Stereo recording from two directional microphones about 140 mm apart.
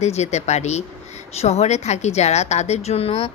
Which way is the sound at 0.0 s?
55° left (ahead or behind).